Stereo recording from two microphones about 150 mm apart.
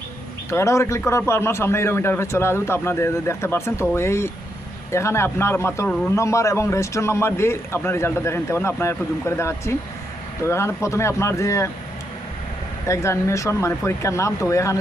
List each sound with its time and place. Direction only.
0.5 s a man's voice: 20° left (ahead or behind)
12.9 s speech: 20° left (ahead or behind)